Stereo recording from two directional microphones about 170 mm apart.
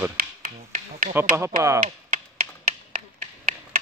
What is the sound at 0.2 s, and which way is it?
Finger snapping, 55° right (ahead or behind).